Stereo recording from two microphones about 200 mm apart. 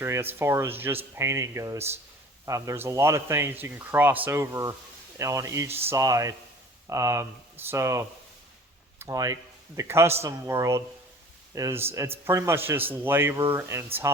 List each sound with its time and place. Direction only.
0.0 s speech: 10° right (ahead or behind)